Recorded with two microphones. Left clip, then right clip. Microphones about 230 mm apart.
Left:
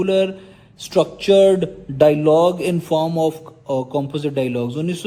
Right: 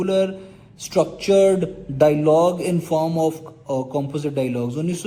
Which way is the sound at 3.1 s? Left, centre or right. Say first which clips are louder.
Left 2 dB; centre.